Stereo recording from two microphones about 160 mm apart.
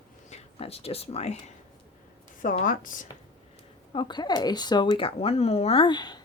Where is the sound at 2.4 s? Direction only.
55° left (ahead or behind).